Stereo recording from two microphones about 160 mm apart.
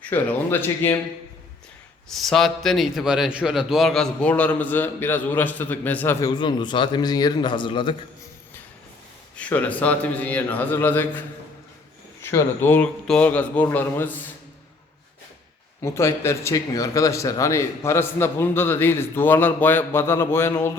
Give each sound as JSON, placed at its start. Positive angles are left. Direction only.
{"t": 0.0, "sound": "speech", "side_deg": 10}
{"t": 2.0, "sound": "speech", "side_deg": 0}
{"t": 6.3, "sound": "a man's voice", "side_deg": 30}
{"t": 9.3, "sound": "speech", "side_deg": 10}
{"t": 15.8, "sound": "speech", "side_deg": 15}